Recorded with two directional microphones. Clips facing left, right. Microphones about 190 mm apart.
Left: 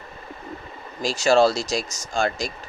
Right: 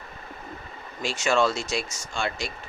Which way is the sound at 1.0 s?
35° left (ahead or behind).